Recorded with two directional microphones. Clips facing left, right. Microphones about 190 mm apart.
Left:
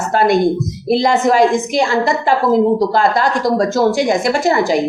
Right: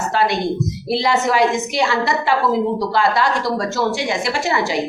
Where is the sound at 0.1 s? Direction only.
50° left (ahead or behind).